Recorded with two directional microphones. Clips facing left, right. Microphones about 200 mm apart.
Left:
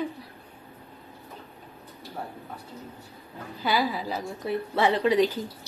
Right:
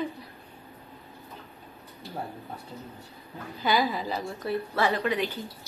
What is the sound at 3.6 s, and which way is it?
Speech, 5° left (ahead or behind).